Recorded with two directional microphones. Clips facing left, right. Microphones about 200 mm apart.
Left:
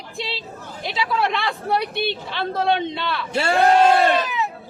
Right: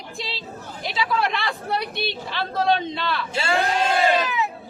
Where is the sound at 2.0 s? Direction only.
20° left (ahead or behind).